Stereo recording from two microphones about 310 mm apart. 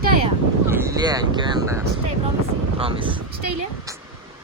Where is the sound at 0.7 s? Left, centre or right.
Centre.